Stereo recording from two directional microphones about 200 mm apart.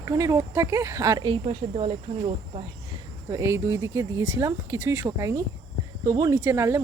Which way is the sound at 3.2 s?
15° right (ahead or behind).